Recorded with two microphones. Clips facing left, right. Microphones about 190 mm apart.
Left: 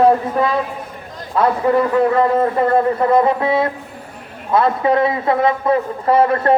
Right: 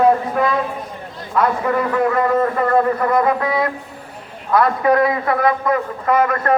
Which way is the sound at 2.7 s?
25° left (ahead or behind).